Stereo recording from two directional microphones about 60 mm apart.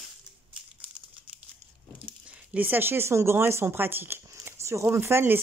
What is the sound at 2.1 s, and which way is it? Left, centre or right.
Speech, right.